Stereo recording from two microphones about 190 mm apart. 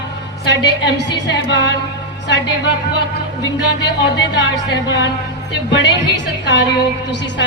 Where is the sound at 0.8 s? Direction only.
65° left (ahead or behind).